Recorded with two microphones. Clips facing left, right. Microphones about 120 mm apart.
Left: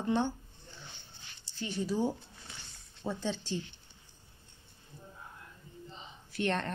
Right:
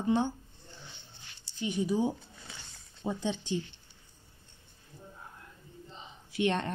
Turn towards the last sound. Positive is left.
turn(degrees=-15)  # may be behind; listen again after turning